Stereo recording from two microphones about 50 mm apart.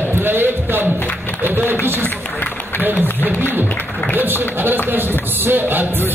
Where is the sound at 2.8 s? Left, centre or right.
Right.